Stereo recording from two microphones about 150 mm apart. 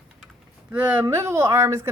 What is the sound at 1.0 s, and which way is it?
Speech, 20° right (ahead or behind).